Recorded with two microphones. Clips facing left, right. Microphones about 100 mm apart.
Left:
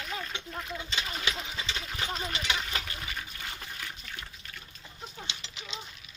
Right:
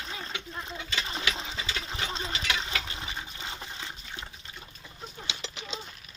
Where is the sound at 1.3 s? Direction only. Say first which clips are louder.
Right 1 dB; 30° right (ahead or behind).